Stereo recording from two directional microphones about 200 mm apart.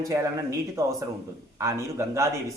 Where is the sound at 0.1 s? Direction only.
15° right (ahead or behind).